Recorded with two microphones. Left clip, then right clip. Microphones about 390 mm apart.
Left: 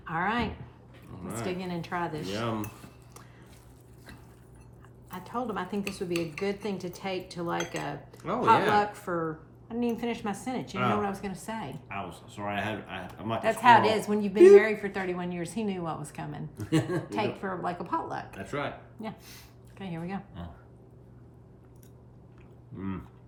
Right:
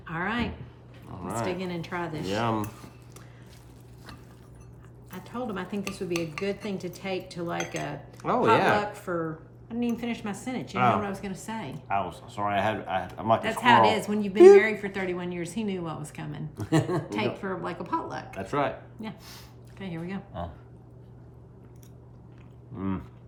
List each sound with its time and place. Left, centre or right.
0.0 s a sound: centre
1.5 s dishes: centre
5.1 s dishes: centre
8.2 s speech: centre
8.7 s dishes: centre
11.9 s speech: centre
13.4 s dishes: centre
16.6 s speech: centre
17.1 s dishes: centre
18.3 s speech: centre
19.8 s dishes: centre
22.8 s speech: centre